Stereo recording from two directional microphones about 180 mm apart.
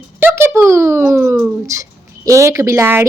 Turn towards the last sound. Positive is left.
turn(degrees=-15)  # may be behind; listen again after turning